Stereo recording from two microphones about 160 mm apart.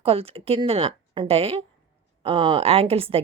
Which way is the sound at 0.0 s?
35° right (ahead or behind).